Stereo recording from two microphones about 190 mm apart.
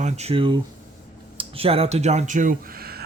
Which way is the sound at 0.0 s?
35° right (ahead or behind).